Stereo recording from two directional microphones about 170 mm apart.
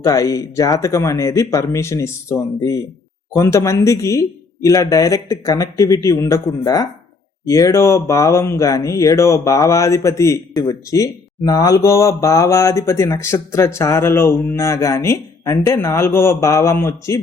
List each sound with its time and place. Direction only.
0.0 s speech: 20° left (ahead or behind)